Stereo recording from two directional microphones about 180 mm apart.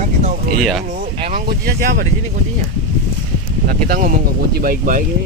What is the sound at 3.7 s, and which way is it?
Speech, 50° right (ahead or behind).